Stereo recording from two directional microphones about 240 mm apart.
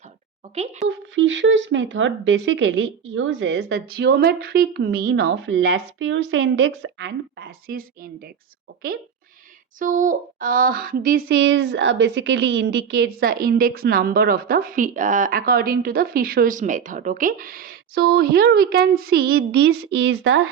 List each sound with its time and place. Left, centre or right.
0.9 s speech: right
9.7 s speech: right